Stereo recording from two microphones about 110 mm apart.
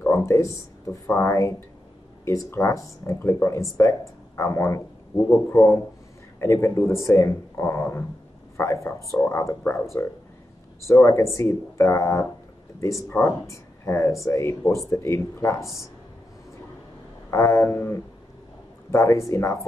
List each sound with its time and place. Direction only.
0.0 s a sound: 25° left (ahead or behind)
1.0 s speech: 25° left (ahead or behind)
10.8 s speech: 25° left (ahead or behind)
17.3 s speech: 25° left (ahead or behind)